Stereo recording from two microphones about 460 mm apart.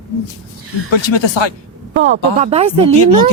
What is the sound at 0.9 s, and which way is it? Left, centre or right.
Speech, left.